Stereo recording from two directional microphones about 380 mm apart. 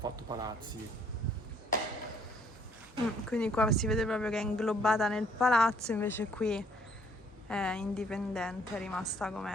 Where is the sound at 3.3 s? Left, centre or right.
Centre.